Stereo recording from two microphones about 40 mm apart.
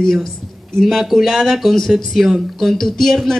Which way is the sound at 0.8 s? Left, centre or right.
Centre.